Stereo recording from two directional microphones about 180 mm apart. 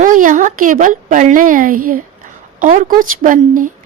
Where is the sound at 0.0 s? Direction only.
45° right (ahead or behind).